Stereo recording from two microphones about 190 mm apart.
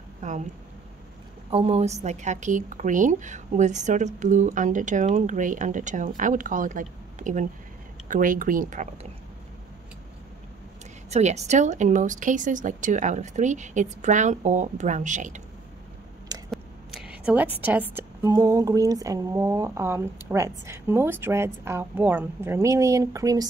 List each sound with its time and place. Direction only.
0.2 s speech: 40° right (ahead or behind)
1.5 s a woman's voice: 30° right (ahead or behind)
11.1 s a woman's voice: 35° right (ahead or behind)
16.4 s a sound: 5° right (ahead or behind)
17.6 s speech: 10° right (ahead or behind)